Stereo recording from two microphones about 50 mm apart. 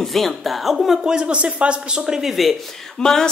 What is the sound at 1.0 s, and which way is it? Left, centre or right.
Speech, centre.